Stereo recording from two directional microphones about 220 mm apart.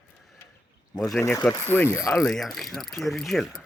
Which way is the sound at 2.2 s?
Centre (ahead or behind).